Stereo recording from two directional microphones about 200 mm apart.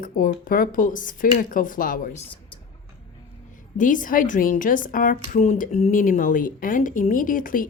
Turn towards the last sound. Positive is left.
turn(degrees=45)  # may be behind; listen again after turning